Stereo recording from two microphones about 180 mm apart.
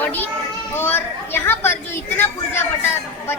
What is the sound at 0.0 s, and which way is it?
Child singing, 10° left (ahead or behind).